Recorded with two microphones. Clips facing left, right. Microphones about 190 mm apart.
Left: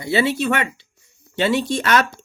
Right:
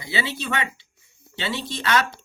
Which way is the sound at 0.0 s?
55° left (ahead or behind).